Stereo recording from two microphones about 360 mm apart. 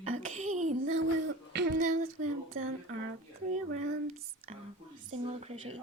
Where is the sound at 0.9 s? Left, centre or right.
Right.